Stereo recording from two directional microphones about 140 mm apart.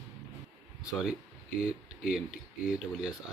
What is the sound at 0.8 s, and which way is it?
Speech, 5° right (ahead or behind).